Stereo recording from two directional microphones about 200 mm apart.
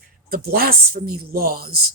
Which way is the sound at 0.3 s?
50° right (ahead or behind).